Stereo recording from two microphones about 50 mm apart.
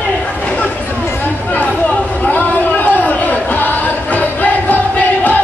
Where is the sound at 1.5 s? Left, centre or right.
Left.